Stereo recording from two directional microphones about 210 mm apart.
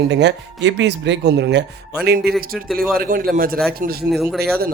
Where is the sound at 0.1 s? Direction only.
55° right (ahead or behind).